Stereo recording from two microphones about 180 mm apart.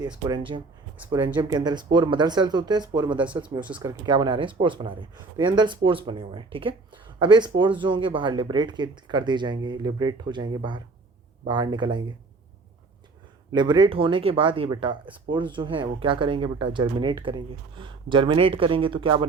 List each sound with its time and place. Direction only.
0.3 s speech: 25° right (ahead or behind)
13.5 s speech: 25° right (ahead or behind)